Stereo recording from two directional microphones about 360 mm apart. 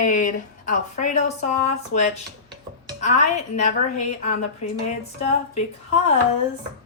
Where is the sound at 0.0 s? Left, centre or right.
Left.